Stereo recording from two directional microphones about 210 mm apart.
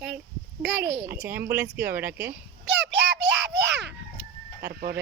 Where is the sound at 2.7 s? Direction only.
60° right (ahead or behind).